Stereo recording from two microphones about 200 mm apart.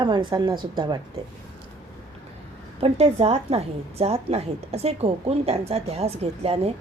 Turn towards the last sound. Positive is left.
turn(degrees=-30)  # may be behind; listen again after turning